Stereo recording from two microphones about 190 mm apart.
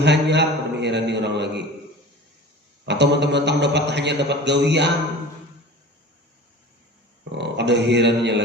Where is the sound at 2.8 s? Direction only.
65° right (ahead or behind).